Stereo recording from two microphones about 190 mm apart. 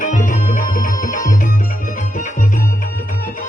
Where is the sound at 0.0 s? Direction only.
45° left (ahead or behind).